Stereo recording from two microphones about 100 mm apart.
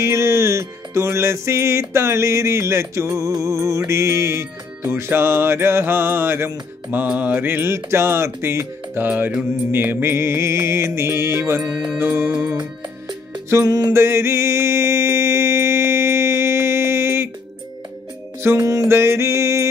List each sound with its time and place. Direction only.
0.0 s music: 25° right (ahead or behind)
13.5 s music: 30° right (ahead or behind)
13.9 s mantra: 25° right (ahead or behind)
18.4 s music: 30° right (ahead or behind)